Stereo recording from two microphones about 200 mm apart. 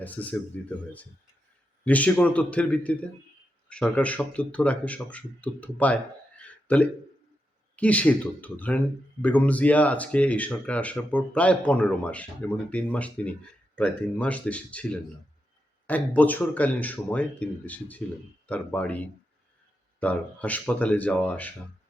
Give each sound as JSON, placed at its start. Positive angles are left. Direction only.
{"t": 0.0, "sound": "speech", "side_deg": 10}
{"t": 1.8, "sound": "speech", "side_deg": 5}
{"t": 15.9, "sound": "speech", "side_deg": 10}